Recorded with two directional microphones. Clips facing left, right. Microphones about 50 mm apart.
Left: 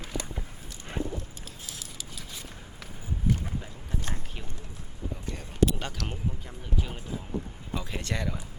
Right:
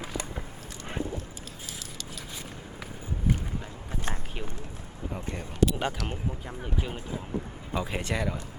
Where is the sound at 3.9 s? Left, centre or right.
Right.